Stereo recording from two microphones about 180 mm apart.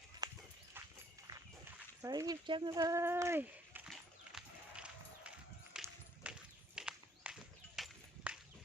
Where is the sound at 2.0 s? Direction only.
20° right (ahead or behind).